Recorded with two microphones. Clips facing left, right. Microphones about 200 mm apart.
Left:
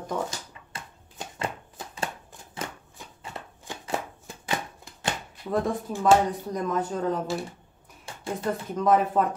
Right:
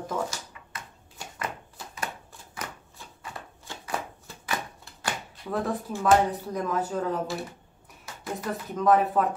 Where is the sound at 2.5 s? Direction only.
20° left (ahead or behind).